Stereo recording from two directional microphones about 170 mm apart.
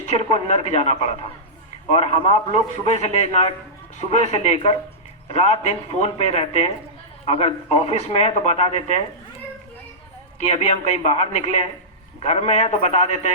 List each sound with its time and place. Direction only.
0.1 s a man's voice: 40° left (ahead or behind)
10.4 s a man's voice: 40° left (ahead or behind)